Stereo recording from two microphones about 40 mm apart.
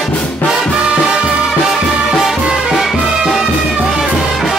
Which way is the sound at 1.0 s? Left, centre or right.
Centre.